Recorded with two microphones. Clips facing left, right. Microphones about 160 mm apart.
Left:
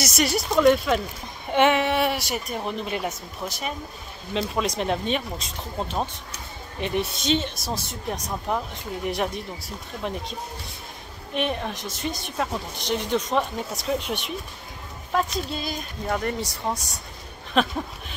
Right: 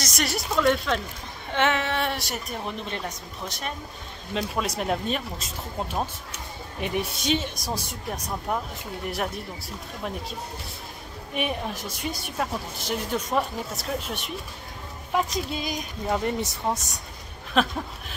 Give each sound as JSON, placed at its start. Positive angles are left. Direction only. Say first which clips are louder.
{"t": 0.0, "sound": "a woman's voice", "louder": "left 5 dB", "side_deg": 0}
{"t": 9.0, "sound": "a woman's voice", "louder": "left 3 dB", "side_deg": 0}
{"t": 11.3, "sound": "a woman's voice", "louder": "left 2 dB", "side_deg": -10}
{"t": 15.3, "sound": "a woman's voice", "louder": "even", "side_deg": -15}
{"t": 17.6, "sound": "a woman's voice", "louder": "left 1 dB", "side_deg": 0}